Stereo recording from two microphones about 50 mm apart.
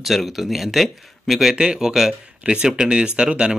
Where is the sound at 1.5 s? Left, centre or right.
Centre.